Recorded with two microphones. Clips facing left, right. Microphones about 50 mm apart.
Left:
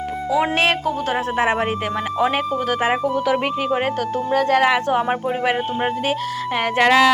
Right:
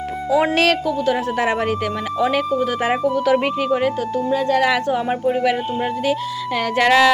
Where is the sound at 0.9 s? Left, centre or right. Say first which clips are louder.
Right 2 dB; left.